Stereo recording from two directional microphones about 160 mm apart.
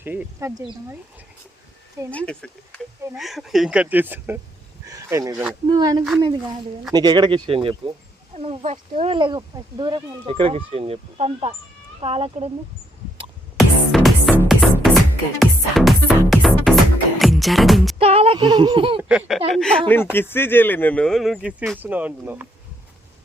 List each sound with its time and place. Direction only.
0.0 s speech: 10° right (ahead or behind)
2.1 s speech: 5° left (ahead or behind); by 12.5 s 40° right (ahead or behind)
13.6 s music: centre (ahead or behind)
18.0 s speech: 35° right (ahead or behind)
19.0 s speech: 5° right (ahead or behind)